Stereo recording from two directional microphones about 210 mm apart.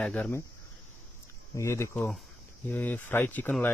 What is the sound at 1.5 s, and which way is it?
A man's voice, 15° left (ahead or behind).